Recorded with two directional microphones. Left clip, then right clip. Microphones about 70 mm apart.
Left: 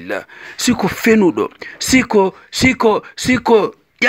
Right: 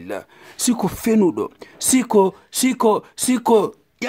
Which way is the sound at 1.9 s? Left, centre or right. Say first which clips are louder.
Left 3 dB; centre.